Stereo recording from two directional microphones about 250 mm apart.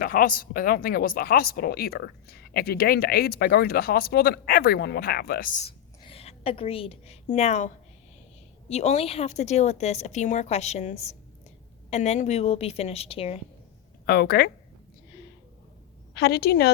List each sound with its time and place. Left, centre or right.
0.0 s speech: left
8.7 s a woman's voice: left
14.0 s speech: left
16.1 s speech: left